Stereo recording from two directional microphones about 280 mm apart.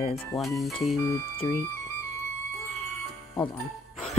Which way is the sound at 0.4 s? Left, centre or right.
Centre.